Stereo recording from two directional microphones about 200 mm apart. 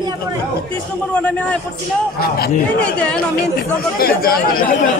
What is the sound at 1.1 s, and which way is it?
Speech, 5° left (ahead or behind).